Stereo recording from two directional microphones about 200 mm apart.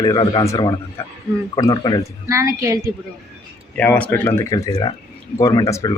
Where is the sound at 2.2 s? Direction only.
15° right (ahead or behind).